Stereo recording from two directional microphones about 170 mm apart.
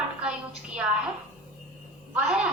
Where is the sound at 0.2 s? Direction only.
5° right (ahead or behind).